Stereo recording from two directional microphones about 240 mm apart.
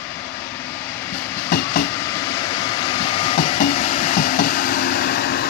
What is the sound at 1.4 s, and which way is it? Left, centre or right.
Vehicle, left.